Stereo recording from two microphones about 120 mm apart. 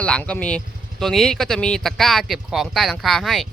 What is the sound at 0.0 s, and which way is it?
Speech, 10° left (ahead or behind).